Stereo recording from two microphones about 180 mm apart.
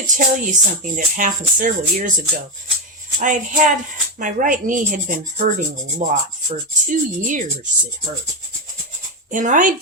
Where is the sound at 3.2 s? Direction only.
45° right (ahead or behind).